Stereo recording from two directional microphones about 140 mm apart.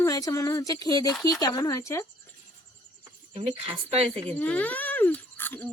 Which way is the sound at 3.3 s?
50° right (ahead or behind).